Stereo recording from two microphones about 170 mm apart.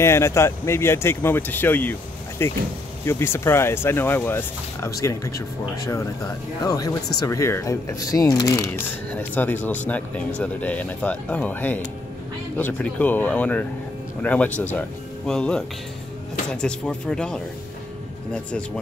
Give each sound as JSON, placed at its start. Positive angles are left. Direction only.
{"t": 0.0, "sound": "speech", "side_deg": 15}
{"t": 6.6, "sound": "speech", "side_deg": 20}